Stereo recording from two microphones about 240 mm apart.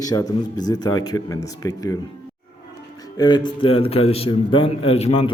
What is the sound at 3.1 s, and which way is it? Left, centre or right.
A man's voice, centre.